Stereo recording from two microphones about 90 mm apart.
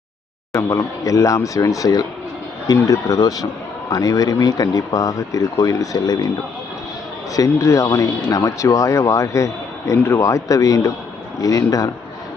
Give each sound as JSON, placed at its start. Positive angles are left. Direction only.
{"t": 0.5, "sound": "a man's voice", "side_deg": 35}
{"t": 7.3, "sound": "speech", "side_deg": 35}